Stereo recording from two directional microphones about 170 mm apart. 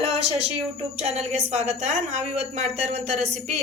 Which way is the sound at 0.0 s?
40° right (ahead or behind).